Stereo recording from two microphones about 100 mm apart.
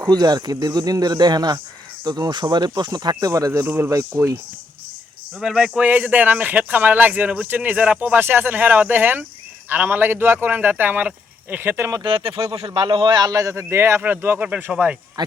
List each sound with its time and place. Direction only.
0.0 s a man's voice: 40° right (ahead or behind)
5.4 s a man's voice: 5° right (ahead or behind); by 12.0 s 30° right (ahead or behind)
12.0 s speech: 55° right (ahead or behind)
12.5 s a man's voice: 70° right (ahead or behind); by 14.9 s 10° right (ahead or behind)
15.2 s speech: 45° right (ahead or behind)